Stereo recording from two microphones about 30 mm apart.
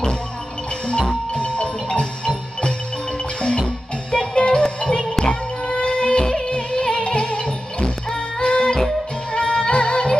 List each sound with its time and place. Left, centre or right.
1.3 s music: left
6.5 s music: left